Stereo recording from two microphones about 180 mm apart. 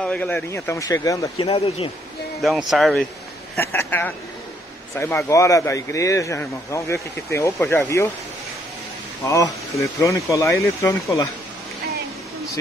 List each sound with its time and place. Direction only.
0.0 s speech: 5° left (ahead or behind)
2.4 s speech: centre (ahead or behind)
3.5 s speech: 10° left (ahead or behind)
9.2 s speech: 15° left (ahead or behind)